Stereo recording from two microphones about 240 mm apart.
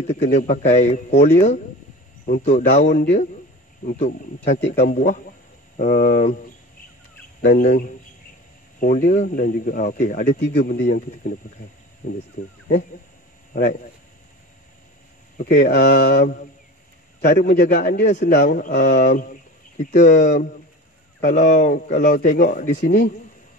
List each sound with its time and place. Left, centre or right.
0.3 s speech: left
2.2 s speech: left
2.5 s speech: left
2.9 s a man's voice: left
3.8 s speech: left
4.6 s a man's voice: left
4.9 s speech: left
7.4 s speech: left
10.4 s speech: left
15.3 s speech: left